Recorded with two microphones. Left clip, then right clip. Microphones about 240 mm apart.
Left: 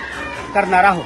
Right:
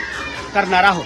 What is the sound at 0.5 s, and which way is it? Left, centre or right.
Speech, centre.